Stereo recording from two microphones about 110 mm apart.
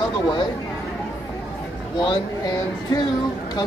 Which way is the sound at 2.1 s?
40° left (ahead or behind).